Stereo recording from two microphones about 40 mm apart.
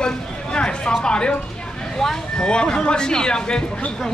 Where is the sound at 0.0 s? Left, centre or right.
Left.